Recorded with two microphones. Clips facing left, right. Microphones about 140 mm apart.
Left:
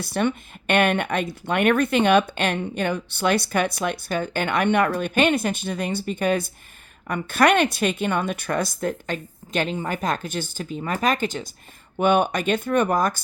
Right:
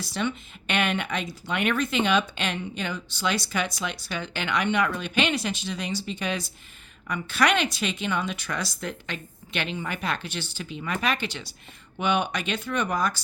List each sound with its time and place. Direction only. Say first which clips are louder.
0.0 s speech: left 6 dB; 55° left (ahead or behind)